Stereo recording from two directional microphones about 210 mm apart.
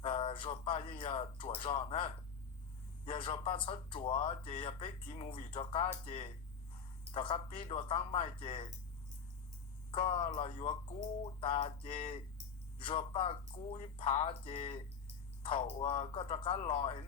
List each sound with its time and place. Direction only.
0.0 s speech: 25° left (ahead or behind)
9.9 s speech: 25° left (ahead or behind)